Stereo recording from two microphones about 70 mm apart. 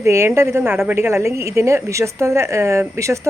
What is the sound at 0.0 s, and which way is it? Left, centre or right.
A woman's voice, right.